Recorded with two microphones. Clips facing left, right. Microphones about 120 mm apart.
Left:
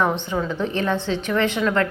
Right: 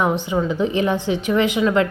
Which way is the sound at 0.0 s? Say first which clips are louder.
Right 2 dB; 15° right (ahead or behind).